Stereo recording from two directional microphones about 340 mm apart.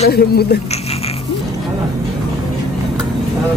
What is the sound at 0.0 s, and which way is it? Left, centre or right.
Speech, left.